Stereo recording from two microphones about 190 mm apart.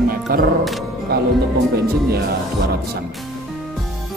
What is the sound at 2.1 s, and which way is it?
Speech, 55° right (ahead or behind).